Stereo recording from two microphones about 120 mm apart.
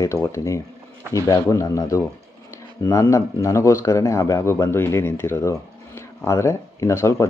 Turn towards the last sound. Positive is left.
turn(degrees=25)  # may be behind; listen again after turning